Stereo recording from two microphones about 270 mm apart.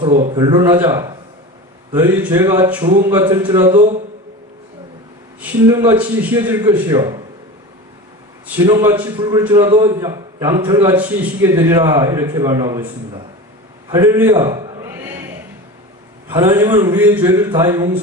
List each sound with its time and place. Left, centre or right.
0.0 s a man's voice: right
5.4 s a man's voice: centre
8.5 s a man's voice: centre
13.8 s a sound: centre
16.3 s a man's voice: centre